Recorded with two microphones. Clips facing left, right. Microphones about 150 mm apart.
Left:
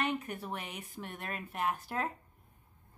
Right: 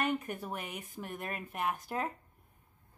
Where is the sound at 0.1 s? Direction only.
10° right (ahead or behind).